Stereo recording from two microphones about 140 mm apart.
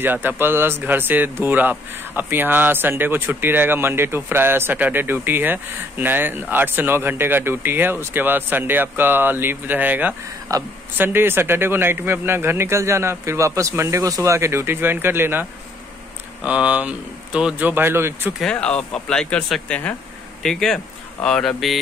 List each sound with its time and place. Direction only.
0.0 s a man's voice: 15° right (ahead or behind)
16.4 s a man's voice: 10° right (ahead or behind)
18.4 s speech: 5° left (ahead or behind)